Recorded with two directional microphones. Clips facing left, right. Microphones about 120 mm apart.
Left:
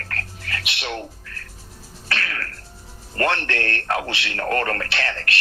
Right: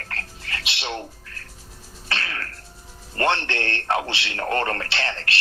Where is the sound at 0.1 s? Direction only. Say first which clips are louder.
Left 2 dB; 25° right (ahead or behind).